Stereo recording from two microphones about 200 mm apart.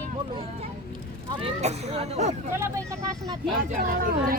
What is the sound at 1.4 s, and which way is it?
Speech, 30° right (ahead or behind).